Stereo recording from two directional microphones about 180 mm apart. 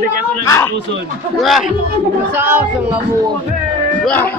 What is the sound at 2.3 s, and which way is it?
Speech, 10° right (ahead or behind).